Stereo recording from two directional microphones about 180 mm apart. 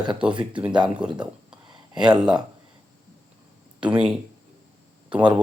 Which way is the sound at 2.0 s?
25° right (ahead or behind).